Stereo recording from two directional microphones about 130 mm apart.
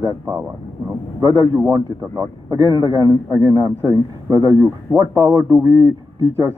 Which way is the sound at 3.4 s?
20° right (ahead or behind).